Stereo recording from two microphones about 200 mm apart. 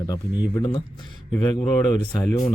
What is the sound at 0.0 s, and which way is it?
Speech, 20° left (ahead or behind).